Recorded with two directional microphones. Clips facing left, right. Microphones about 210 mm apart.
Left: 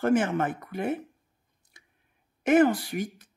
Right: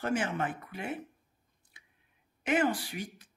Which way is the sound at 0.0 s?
50° left (ahead or behind).